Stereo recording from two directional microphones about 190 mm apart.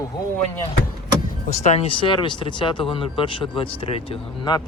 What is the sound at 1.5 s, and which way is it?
Speech, 35° left (ahead or behind).